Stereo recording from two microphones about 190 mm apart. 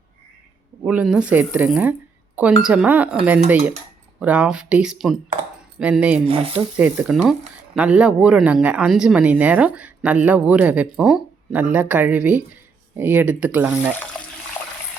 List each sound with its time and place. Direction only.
0.9 s speech: 5° right (ahead or behind)
6.2 s speech: 30° right (ahead or behind)
6.7 s speech: 10° right (ahead or behind)